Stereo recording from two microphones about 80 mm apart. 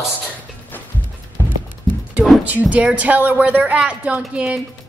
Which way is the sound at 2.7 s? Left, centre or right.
Centre.